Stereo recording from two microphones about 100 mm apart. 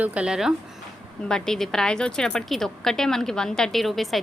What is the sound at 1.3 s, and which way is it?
A woman's voice, 5° left (ahead or behind).